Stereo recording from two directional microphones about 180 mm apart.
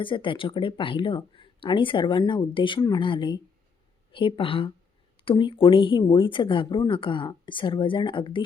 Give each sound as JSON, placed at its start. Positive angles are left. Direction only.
{"t": 0.0, "sound": "speech", "side_deg": 25}